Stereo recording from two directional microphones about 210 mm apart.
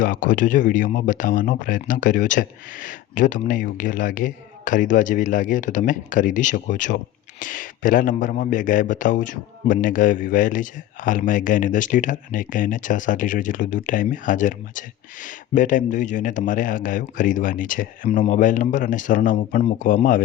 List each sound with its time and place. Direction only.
0.0 s speech: 40° left (ahead or behind)